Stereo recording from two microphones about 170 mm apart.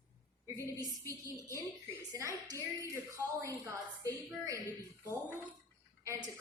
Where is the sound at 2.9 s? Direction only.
20° right (ahead or behind).